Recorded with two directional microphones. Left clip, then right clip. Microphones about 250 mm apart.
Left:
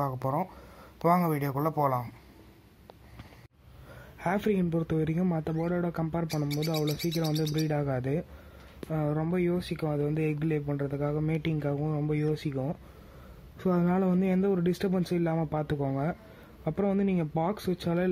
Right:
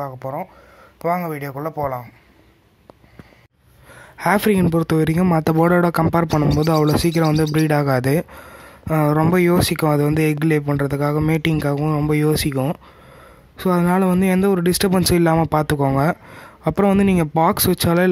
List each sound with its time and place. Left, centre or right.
0.0 s speech: centre
4.2 s speech: right
7.2 s speech: right
7.5 s speech: right